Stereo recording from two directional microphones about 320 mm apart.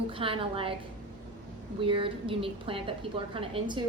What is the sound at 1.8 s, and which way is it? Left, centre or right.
A woman's voice, centre.